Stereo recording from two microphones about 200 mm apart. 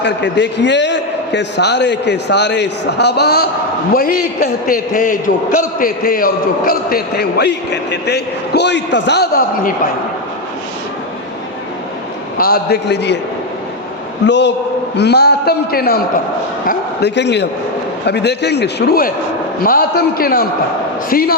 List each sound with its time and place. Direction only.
0.0 s a man's voice: 60° left (ahead or behind)
12.4 s a man's voice: 50° left (ahead or behind)
14.3 s a man's voice: 60° left (ahead or behind)